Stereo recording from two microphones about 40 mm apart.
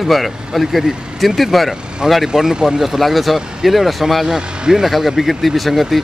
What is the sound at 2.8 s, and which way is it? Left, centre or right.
Speech, centre.